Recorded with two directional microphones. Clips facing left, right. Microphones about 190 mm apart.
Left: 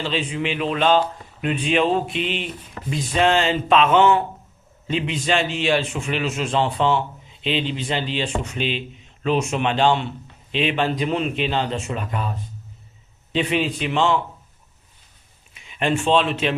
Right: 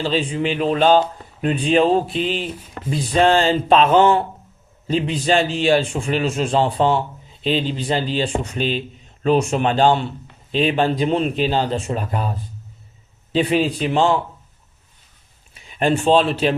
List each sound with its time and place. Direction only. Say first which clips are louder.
0.0 s a man's voice: right 4 dB; 35° right (ahead or behind)
13.3 s a man's voice: right 4 dB; 35° right (ahead or behind)
15.5 s speech: right 3 dB; 35° right (ahead or behind)